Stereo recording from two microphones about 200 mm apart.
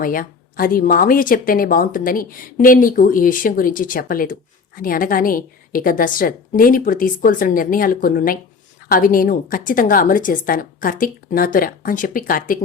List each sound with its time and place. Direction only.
0.0 s a woman's voice: 45° left (ahead or behind)